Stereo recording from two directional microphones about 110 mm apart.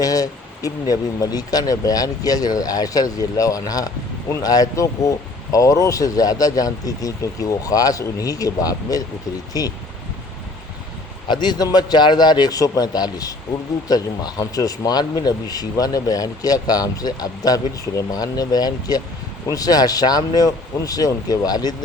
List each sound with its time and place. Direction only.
0.0 s speech: 35° left (ahead or behind)
11.3 s speech: 40° left (ahead or behind)